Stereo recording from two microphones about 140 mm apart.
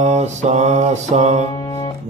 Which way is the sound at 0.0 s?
55° right (ahead or behind).